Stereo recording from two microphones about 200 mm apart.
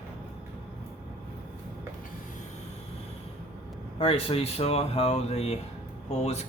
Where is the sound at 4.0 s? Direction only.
30° left (ahead or behind).